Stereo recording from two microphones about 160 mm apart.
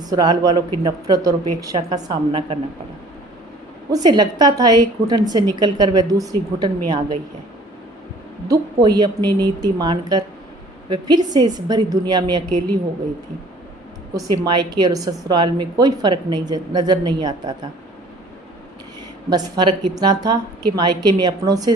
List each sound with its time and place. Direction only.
0.0 s a woman's voice: 25° right (ahead or behind)
3.9 s a woman's voice: 25° right (ahead or behind)
8.4 s a woman's voice: 25° right (ahead or behind)
14.1 s a woman's voice: 25° right (ahead or behind)
19.3 s a woman's voice: 25° right (ahead or behind)